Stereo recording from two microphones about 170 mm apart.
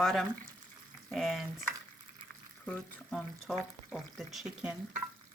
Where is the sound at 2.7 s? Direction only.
5° left (ahead or behind).